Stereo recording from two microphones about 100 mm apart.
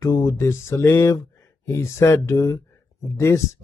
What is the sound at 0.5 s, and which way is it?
Speech, 25° left (ahead or behind).